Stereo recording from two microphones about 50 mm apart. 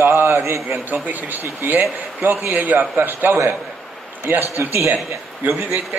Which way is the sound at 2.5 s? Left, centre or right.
Right.